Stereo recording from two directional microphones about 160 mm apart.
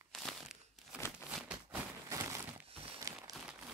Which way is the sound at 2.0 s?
20° right (ahead or behind).